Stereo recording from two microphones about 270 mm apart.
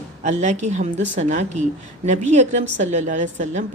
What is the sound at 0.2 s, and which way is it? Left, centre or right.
A woman's voice, right.